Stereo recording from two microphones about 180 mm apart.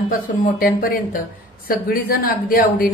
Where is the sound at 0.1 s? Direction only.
50° left (ahead or behind).